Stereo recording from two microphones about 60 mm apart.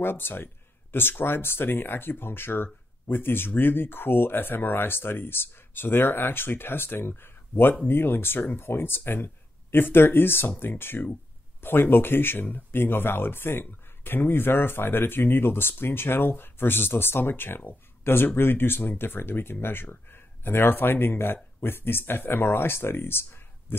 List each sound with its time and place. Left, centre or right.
0.0 s speech: left